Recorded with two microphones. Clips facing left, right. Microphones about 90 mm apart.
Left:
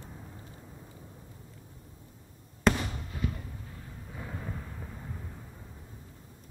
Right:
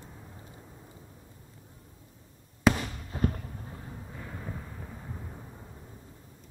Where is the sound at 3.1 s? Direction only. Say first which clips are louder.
Right 6 dB; 45° right (ahead or behind).